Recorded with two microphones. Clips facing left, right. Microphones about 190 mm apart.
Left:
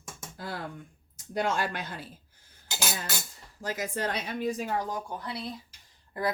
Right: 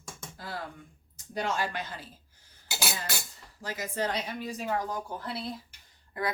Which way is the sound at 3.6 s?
50° left (ahead or behind).